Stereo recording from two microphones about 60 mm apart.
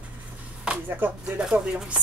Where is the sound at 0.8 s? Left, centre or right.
Right.